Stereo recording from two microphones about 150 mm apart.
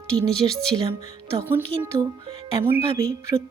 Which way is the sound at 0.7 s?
30° right (ahead or behind).